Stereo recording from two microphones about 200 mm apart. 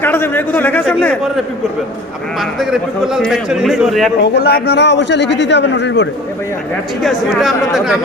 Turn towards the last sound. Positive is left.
turn(degrees=0)  # may be behind; listen again after turning